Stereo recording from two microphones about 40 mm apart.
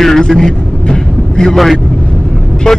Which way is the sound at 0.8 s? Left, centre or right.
Centre.